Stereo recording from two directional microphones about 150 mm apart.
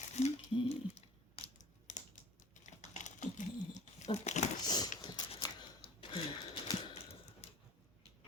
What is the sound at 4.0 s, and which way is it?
Crumpling, 50° left (ahead or behind).